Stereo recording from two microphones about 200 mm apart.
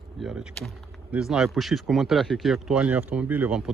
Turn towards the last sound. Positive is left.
turn(degrees=-5)  # may be behind; listen again after turning